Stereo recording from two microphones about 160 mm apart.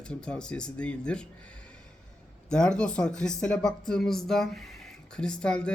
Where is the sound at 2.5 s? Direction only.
5° left (ahead or behind).